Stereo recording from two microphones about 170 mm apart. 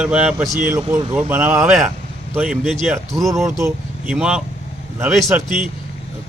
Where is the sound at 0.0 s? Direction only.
5° right (ahead or behind).